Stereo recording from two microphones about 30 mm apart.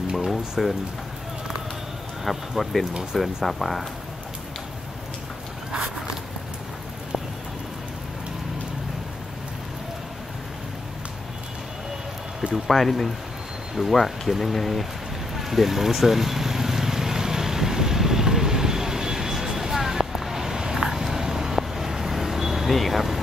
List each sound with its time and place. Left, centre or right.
0.3 s speech: centre
2.3 s speech: centre
12.7 s speech: centre
15.3 s vehicle: centre
22.7 s speech: centre